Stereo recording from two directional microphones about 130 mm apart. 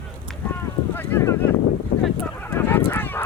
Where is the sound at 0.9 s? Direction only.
20° left (ahead or behind).